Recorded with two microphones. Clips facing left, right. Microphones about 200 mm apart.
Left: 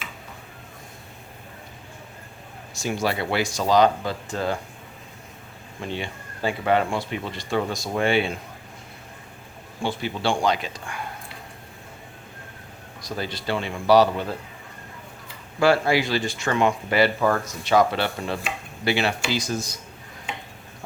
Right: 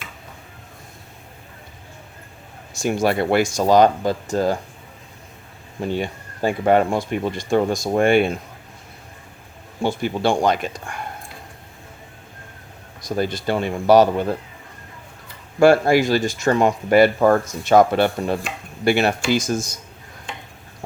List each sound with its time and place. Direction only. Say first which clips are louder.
2.8 s speech: right 6 dB; 50° right (ahead or behind)
5.9 s speech: right 6 dB; 45° right (ahead or behind)
9.8 s speech: right 5 dB; 45° right (ahead or behind)
13.0 s speech: right 8 dB; 45° right (ahead or behind)
15.6 s speech: right 6 dB; 50° right (ahead or behind)